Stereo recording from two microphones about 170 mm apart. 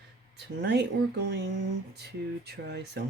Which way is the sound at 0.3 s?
85° right.